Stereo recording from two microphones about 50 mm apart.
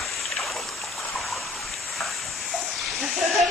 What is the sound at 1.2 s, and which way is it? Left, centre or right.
Stream, centre.